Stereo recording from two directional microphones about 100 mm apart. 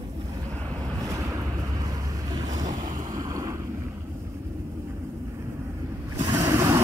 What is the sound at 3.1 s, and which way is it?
Boat, 35° right (ahead or behind).